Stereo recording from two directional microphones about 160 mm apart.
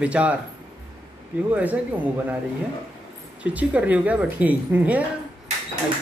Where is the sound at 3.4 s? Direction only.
10° right (ahead or behind).